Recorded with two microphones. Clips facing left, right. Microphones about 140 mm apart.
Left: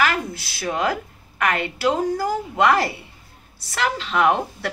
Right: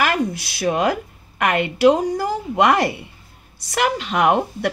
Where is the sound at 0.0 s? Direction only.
15° right (ahead or behind).